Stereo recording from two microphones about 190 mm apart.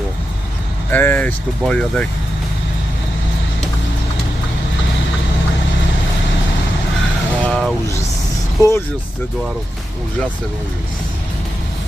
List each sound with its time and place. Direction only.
0.9 s speech: 10° left (ahead or behind)
7.4 s vehicle: 5° left (ahead or behind)
8.6 s speech: 20° left (ahead or behind)